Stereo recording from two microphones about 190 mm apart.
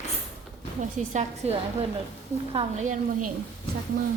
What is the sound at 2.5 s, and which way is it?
Speech, 40° right (ahead or behind).